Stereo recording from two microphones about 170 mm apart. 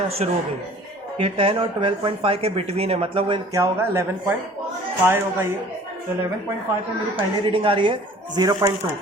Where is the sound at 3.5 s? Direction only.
20° right (ahead or behind).